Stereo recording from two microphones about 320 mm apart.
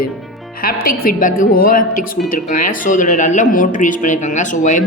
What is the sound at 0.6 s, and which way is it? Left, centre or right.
Speech, left.